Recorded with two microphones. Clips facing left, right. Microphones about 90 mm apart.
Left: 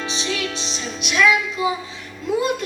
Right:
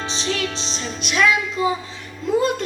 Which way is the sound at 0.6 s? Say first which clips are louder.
Even; centre (ahead or behind).